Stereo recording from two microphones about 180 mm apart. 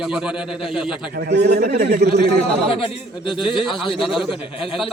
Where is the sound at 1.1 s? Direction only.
65° right (ahead or behind).